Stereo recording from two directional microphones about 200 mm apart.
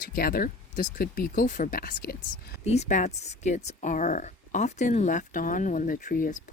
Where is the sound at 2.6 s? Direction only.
35° left (ahead or behind).